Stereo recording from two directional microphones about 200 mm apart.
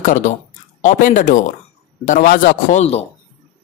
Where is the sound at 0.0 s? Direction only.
40° left (ahead or behind).